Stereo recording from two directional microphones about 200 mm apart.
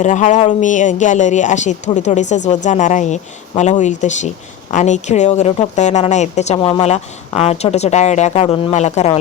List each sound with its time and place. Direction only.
0.0 s speech: 35° left (ahead or behind)